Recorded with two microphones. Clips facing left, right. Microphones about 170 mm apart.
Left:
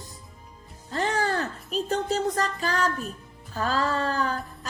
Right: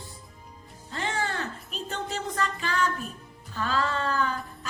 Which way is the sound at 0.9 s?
40° left (ahead or behind).